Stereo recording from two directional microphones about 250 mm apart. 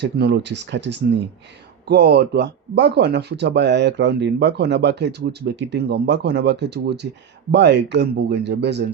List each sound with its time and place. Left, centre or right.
0.0 s speech: right